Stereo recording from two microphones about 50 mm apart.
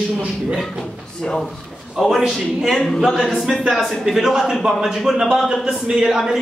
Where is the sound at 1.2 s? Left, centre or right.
Centre.